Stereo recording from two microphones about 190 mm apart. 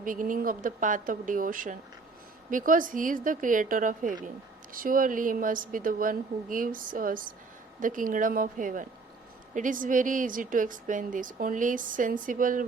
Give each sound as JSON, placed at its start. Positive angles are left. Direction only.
{"t": 0.0, "sound": "a woman's voice", "side_deg": -45}